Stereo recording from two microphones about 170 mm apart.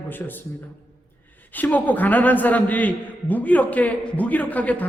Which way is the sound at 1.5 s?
10° left (ahead or behind).